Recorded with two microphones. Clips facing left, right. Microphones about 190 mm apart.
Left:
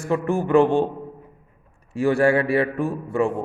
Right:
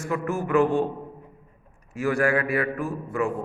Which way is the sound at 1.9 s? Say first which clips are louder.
Left 5 dB; 30° left (ahead or behind).